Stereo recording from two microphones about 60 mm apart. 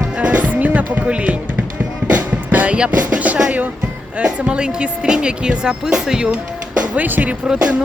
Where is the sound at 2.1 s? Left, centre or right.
Right.